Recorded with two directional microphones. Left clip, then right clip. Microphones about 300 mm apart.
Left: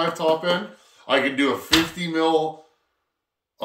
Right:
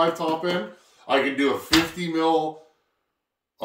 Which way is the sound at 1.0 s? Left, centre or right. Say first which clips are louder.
Left 1 dB; centre.